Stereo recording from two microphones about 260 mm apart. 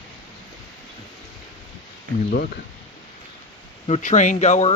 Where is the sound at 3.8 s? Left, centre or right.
Left.